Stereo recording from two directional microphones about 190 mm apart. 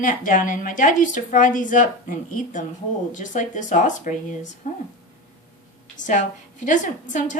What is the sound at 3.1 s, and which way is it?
Speech, 40° left (ahead or behind).